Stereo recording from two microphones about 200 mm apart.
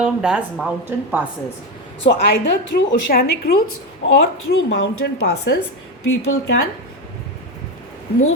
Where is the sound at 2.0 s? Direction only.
55° left (ahead or behind).